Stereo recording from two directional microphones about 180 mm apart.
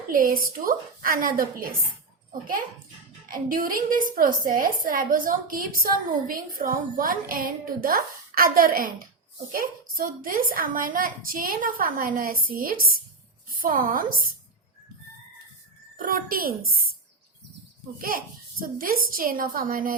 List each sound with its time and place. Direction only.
0.1 s a woman's voice: 50° right (ahead or behind)
3.2 s a woman's voice: 50° right (ahead or behind)
16.0 s a woman's voice: 55° right (ahead or behind)
18.6 s a woman's voice: 50° right (ahead or behind)